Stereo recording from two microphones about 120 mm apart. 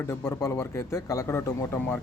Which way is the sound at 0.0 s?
25° left (ahead or behind).